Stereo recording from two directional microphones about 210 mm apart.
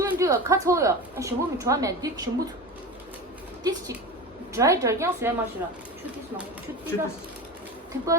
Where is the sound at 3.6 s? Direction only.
15° right (ahead or behind).